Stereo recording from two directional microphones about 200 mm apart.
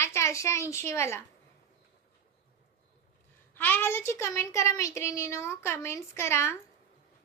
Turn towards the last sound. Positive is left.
turn(degrees=15)  # may be behind; listen again after turning